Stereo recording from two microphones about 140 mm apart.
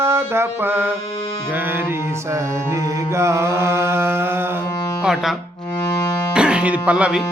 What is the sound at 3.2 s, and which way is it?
Mantra, 20° right (ahead or behind).